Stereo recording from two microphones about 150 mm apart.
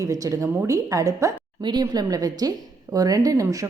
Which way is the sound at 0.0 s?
20° right (ahead or behind).